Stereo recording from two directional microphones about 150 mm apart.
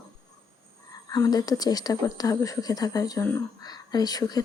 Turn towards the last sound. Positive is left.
turn(degrees=25)  # may be behind; listen again after turning